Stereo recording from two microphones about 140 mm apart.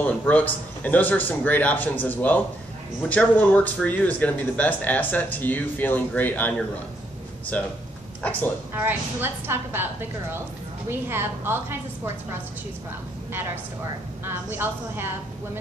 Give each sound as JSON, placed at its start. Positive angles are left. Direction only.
{"t": 0.0, "sound": "speech", "side_deg": 10}
{"t": 8.7, "sound": "a woman's voice", "side_deg": -15}
{"t": 14.2, "sound": "a woman's voice", "side_deg": -15}